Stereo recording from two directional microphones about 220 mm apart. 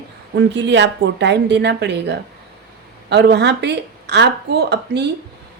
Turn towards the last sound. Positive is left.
turn(degrees=-50)  # may be behind; listen again after turning